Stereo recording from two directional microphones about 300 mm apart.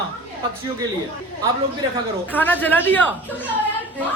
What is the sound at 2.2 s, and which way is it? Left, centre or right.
Speech, centre.